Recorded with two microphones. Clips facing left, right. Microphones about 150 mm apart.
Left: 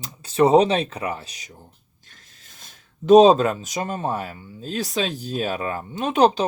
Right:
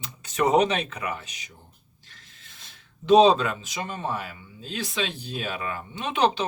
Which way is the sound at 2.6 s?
45° left (ahead or behind).